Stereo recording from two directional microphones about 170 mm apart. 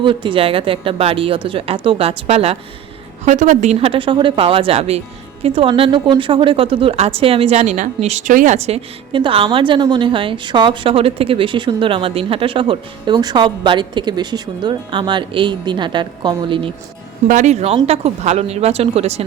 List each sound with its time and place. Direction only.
0.0 s speech: 30° right (ahead or behind)
3.2 s speech: 45° right (ahead or behind); by 16.7 s 30° right (ahead or behind)
17.2 s speech: 45° right (ahead or behind)